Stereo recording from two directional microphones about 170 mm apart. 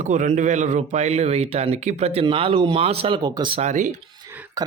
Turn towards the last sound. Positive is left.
turn(degrees=-45)  # may be behind; listen again after turning